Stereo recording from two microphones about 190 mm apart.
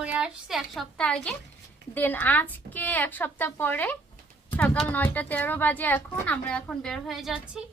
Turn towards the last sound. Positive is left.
turn(degrees=0)  # may be behind; listen again after turning